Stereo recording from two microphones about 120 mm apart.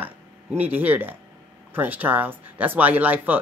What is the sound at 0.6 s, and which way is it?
Speech, 15° right (ahead or behind).